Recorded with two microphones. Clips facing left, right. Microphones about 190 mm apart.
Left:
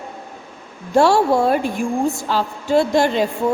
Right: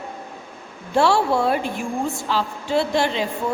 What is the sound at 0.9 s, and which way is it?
A woman's voice, 45° left (ahead or behind).